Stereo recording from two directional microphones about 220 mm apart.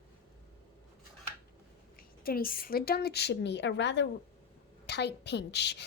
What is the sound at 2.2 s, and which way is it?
A woman's voice, 40° left (ahead or behind).